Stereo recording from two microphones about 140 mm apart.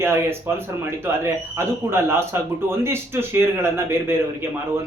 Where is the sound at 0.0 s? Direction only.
15° right (ahead or behind).